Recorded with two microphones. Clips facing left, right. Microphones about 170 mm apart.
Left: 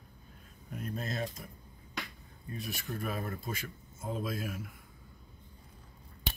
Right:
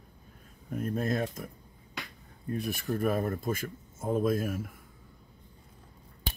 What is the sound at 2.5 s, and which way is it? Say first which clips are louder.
Speech: right 8 dB; 55° right (ahead or behind).